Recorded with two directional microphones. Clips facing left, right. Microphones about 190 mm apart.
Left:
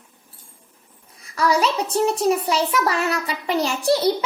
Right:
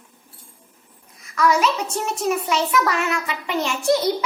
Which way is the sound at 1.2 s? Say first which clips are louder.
Right 1 dB; 35° left (ahead or behind).